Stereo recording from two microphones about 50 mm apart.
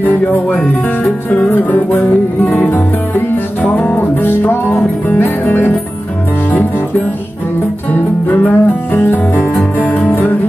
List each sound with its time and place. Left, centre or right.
0.0 s music: left
3.6 s music: left
7.9 s music: left